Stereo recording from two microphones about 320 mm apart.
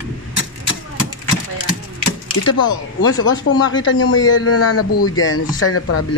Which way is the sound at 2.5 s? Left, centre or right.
Left.